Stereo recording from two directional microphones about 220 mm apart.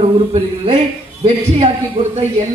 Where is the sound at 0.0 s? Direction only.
25° right (ahead or behind).